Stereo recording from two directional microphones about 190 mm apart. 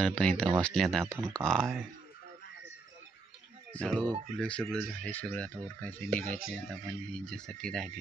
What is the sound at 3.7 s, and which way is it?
Speech, 5° left (ahead or behind).